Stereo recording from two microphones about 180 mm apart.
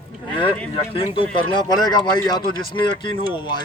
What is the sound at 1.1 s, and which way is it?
Speech, 30° left (ahead or behind).